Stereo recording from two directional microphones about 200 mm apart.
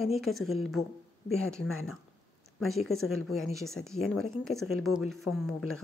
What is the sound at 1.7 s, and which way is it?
Speech, 90° left.